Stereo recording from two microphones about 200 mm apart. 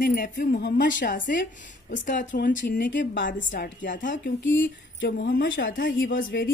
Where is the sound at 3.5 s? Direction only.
40° left (ahead or behind); by 6.1 s 60° left (ahead or behind).